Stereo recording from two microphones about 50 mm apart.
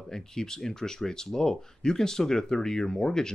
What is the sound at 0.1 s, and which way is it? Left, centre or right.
Speech, centre.